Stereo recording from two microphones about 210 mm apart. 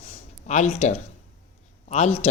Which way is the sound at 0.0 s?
35° left (ahead or behind).